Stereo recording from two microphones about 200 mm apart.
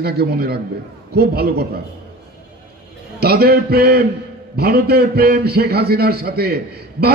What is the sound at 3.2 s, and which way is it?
A man's voice, 50° right (ahead or behind).